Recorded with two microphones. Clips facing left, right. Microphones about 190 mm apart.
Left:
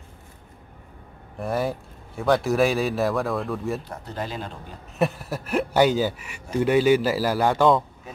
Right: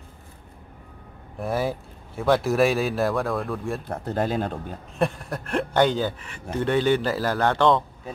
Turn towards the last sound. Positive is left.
turn(degrees=5)  # may be behind; listen again after turning